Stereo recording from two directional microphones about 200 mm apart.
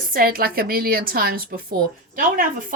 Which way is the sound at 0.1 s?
45° right (ahead or behind).